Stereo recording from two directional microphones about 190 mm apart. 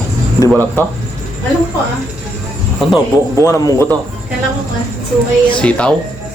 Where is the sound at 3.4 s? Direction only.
15° left (ahead or behind).